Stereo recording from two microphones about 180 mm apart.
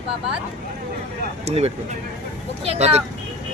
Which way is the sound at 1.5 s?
35° right (ahead or behind).